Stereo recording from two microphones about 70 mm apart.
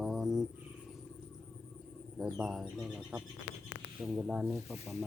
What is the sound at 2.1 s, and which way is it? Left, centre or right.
Speech, centre.